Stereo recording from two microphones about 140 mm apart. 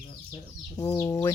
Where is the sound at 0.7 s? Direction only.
30° left (ahead or behind).